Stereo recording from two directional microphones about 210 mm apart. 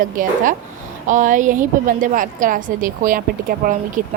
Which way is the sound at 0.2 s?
40° right (ahead or behind).